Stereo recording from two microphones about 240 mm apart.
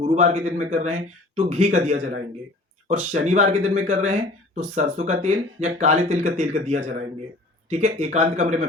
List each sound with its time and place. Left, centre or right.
0.0 s speech: right